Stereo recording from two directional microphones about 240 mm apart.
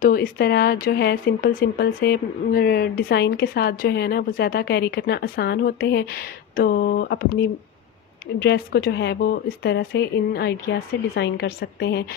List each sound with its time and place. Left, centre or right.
0.0 s speech: left
8.4 s speech: left